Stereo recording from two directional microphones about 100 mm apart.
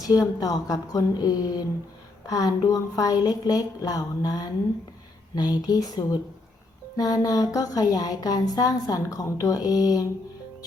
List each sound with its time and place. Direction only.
0.0 s speech: 40° left (ahead or behind)